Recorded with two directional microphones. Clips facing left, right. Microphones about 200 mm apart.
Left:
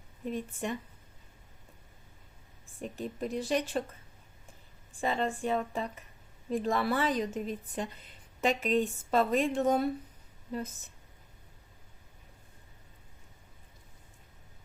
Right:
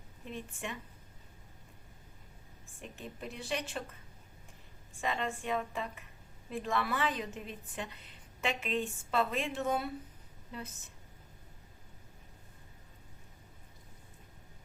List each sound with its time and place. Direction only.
0.3 s a woman's voice: 40° left (ahead or behind)
2.8 s a woman's voice: 40° left (ahead or behind)
4.9 s a woman's voice: 35° left (ahead or behind)